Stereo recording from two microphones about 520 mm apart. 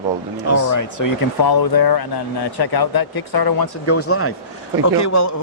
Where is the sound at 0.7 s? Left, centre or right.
Left.